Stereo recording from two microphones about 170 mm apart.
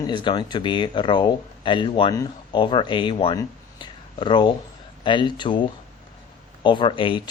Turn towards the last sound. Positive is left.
turn(degrees=30)  # may be behind; listen again after turning